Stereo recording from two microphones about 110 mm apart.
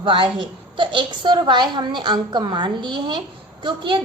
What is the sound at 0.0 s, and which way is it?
A woman's voice, 50° right (ahead or behind).